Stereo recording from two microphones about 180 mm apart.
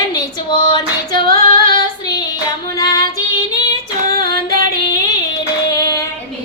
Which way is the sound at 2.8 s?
20° left (ahead or behind).